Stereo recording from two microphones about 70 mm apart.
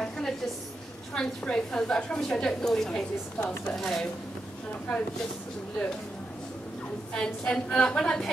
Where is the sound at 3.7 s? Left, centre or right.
Centre.